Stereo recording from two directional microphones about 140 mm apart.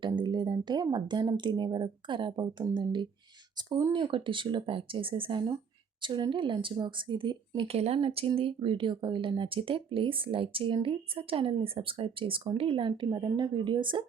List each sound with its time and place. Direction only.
0.2 s speech: 30° right (ahead or behind)